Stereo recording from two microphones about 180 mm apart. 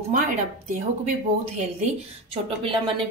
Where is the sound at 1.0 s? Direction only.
40° right (ahead or behind).